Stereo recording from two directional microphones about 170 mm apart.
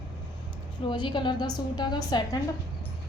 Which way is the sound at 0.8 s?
25° left (ahead or behind).